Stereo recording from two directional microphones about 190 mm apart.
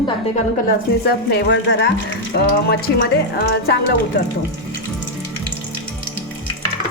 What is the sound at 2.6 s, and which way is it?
Speech, 55° left (ahead or behind).